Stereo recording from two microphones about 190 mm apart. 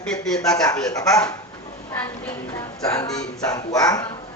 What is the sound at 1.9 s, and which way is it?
A woman's voice, 15° left (ahead or behind).